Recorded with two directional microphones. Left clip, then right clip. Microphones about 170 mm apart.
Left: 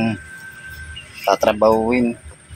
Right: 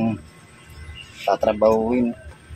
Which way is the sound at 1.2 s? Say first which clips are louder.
Left 3 dB; 25° left (ahead or behind).